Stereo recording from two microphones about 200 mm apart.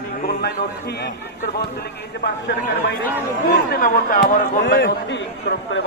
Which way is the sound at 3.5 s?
45° left (ahead or behind).